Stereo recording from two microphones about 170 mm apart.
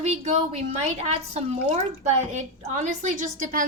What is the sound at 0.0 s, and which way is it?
A woman's voice, 40° right (ahead or behind).